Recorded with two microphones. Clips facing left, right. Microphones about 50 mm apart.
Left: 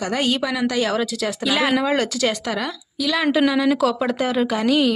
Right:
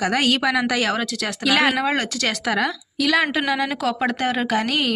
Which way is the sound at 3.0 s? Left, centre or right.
Right.